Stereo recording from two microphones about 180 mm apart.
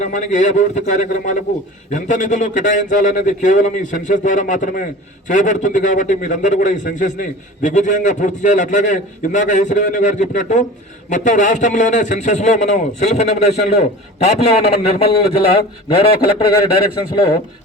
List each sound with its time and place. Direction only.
0.0 s a man's voice: 45° left (ahead or behind)